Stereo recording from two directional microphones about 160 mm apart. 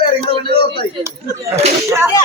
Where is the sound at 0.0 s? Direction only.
30° left (ahead or behind).